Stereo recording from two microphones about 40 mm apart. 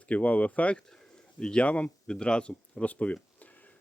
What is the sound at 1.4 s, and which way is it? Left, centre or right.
Speech, left.